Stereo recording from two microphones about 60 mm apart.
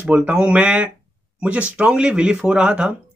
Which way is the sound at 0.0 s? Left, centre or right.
Right.